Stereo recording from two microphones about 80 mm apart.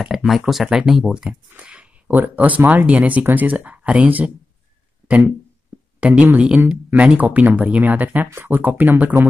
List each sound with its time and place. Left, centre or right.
0.0 s speech: centre
5.9 s speech: centre